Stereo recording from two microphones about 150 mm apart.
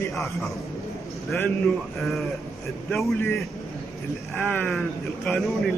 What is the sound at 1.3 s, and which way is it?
Speech, 10° left (ahead or behind).